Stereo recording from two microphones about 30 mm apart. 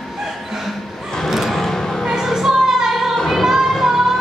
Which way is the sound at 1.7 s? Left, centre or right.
Centre.